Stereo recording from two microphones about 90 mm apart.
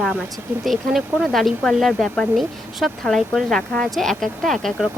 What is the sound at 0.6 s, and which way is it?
Speech, centre (ahead or behind).